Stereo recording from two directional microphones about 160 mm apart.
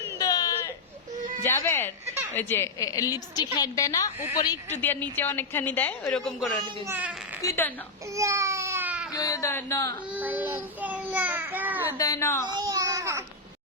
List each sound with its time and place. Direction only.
0.2 s a sound: 25° left (ahead or behind)
1.5 s a woman's voice: 15° left (ahead or behind)
6.6 s a child's voice: 15° right (ahead or behind)
7.4 s a woman's voice: 15° left (ahead or behind)
8.1 s baby cry: 20° right (ahead or behind)
9.1 s a woman's voice: 20° left (ahead or behind)
10.2 s a child's voice: 10° right (ahead or behind)
11.9 s a woman's voice: 20° left (ahead or behind)
12.5 s a sound: 25° right (ahead or behind)